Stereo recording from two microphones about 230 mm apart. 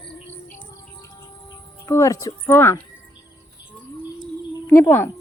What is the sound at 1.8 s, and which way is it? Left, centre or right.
Speech, centre.